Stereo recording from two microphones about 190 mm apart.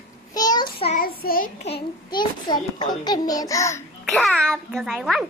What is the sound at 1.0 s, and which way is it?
Speech, 50° left (ahead or behind).